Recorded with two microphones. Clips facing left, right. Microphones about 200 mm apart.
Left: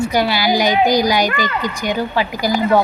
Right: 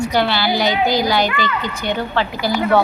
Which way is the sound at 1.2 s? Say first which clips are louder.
Left 1 dB; 40° left (ahead or behind).